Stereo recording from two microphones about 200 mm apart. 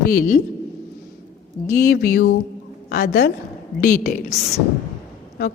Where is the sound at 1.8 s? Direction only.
50° left (ahead or behind).